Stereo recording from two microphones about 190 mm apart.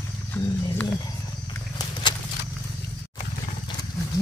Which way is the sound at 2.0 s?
25° left (ahead or behind).